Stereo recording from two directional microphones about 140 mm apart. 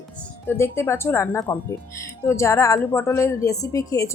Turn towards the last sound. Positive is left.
turn(degrees=25)  # may be behind; listen again after turning